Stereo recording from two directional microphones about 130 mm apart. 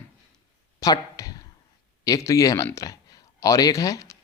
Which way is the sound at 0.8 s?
30° left (ahead or behind).